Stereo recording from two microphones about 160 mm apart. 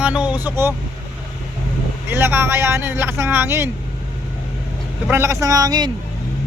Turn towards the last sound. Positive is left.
turn(degrees=-25)  # may be behind; listen again after turning